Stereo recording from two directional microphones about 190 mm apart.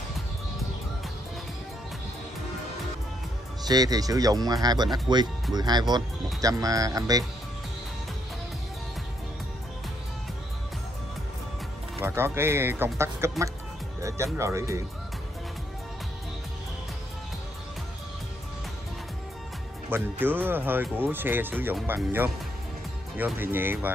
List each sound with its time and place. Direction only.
3.6 s speech: 20° right (ahead or behind)
12.0 s speech: 10° right (ahead or behind)
19.9 s speech: 10° right (ahead or behind)